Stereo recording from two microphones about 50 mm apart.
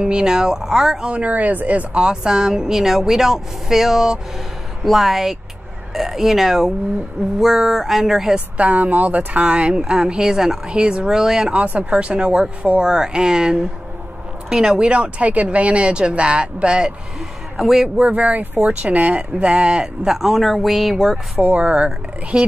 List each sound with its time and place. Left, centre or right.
0.0 s speech: centre
1.1 s speech: right
2.0 s speech: centre
8.5 s speech: right; by 11.5 s centre
11.5 s speech: right; by 14.8 s centre
14.8 s speech: right
17.6 s speech: centre
18.1 s speech: right; by 20.9 s centre
21.4 s speech: right
21.6 s speech: centre